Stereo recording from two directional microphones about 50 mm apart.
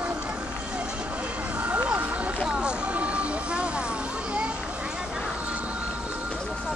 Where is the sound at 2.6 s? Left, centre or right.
Right.